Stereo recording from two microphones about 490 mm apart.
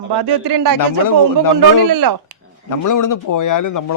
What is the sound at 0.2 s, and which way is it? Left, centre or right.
Speech, right.